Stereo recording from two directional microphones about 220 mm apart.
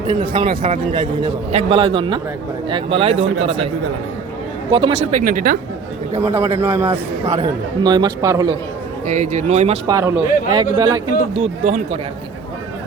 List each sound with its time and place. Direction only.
0.2 s a man's voice: 20° right (ahead or behind)
0.5 s a man's voice: 35° right (ahead or behind)
4.7 s a man's voice: 20° right (ahead or behind)
5.1 s speech: 40° right (ahead or behind)
6.2 s a man's voice: 10° right (ahead or behind)
6.9 s a man's voice: 20° right (ahead or behind)
9.0 s speech: 35° right (ahead or behind)
9.8 s a man's voice: 15° right (ahead or behind)
11.3 s a man's voice: 30° right (ahead or behind)